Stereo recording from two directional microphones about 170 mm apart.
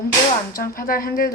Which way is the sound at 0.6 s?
60° left (ahead or behind).